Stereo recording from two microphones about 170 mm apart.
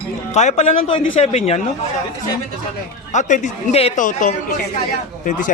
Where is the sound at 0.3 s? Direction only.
40° left (ahead or behind).